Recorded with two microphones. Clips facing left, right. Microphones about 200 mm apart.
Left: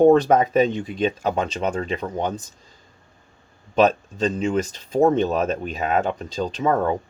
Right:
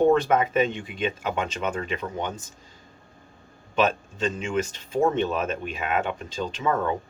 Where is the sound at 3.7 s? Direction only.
35° left (ahead or behind).